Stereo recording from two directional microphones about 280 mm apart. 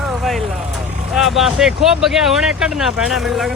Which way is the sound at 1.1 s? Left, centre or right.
Centre.